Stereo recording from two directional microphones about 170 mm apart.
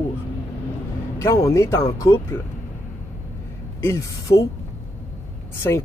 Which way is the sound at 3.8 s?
15° left (ahead or behind).